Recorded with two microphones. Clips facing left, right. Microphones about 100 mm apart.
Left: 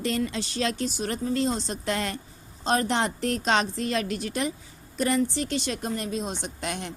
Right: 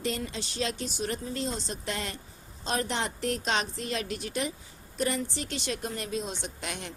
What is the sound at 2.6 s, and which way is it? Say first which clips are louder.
A woman's voice: left 6 dB; 60° left (ahead or behind).